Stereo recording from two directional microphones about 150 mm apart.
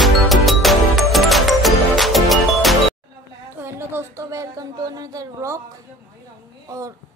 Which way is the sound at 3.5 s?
15° right (ahead or behind).